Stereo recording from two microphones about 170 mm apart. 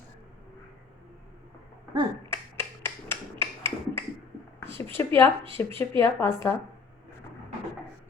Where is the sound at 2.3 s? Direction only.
15° left (ahead or behind).